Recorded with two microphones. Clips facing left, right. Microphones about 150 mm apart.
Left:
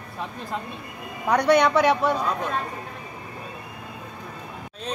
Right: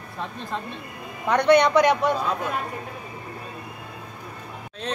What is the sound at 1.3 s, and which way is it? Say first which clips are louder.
Speech: right 1 dB; 10° left (ahead or behind).